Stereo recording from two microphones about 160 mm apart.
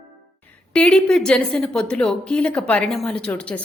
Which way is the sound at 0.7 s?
10° left (ahead or behind).